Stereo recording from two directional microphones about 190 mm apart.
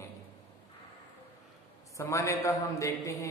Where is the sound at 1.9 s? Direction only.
15° left (ahead or behind).